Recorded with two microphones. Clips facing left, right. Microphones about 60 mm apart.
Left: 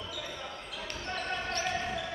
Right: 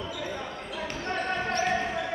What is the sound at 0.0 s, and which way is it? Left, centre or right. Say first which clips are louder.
Basketball bounce: right 6 dB; right.